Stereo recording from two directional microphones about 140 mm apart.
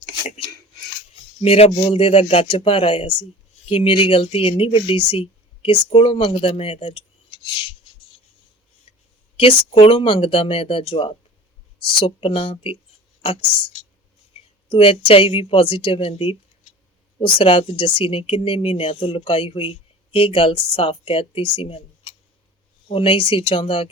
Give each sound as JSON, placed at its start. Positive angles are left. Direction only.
{"t": 1.1, "sound": "a sound", "side_deg": 40}
{"t": 1.8, "sound": "speech", "side_deg": 45}
{"t": 9.4, "sound": "speech", "side_deg": 40}
{"t": 14.7, "sound": "speech", "side_deg": 40}